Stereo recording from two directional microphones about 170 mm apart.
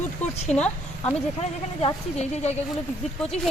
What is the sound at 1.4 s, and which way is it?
Speech, 40° left (ahead or behind).